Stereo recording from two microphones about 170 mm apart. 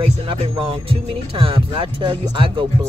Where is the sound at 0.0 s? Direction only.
30° right (ahead or behind).